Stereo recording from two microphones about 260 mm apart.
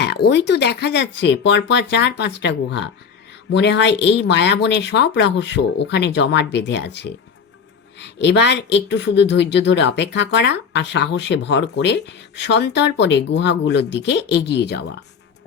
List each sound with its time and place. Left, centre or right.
0.0 s speech: left